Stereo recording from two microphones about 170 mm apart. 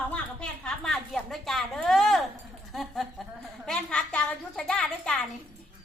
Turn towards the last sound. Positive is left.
turn(degrees=5)  # may be behind; listen again after turning